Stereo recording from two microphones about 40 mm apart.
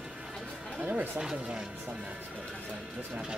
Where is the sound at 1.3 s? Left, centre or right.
Right.